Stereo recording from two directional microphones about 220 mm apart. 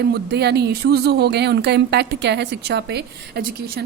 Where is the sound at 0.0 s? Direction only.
50° right (ahead or behind).